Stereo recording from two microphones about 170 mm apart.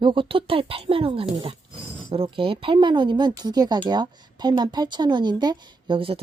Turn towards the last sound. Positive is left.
turn(degrees=-35)  # may be behind; listen again after turning